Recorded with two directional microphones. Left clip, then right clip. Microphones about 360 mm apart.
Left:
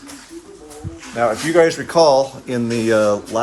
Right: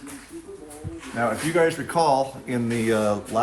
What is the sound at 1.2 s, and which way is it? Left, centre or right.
Speech, left.